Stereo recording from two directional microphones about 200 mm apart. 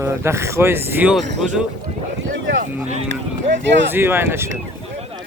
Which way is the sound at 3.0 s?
60° right (ahead or behind).